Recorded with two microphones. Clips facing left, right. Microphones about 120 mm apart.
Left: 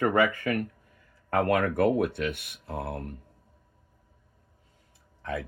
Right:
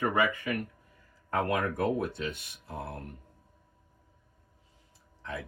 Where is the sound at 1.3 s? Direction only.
65° left (ahead or behind).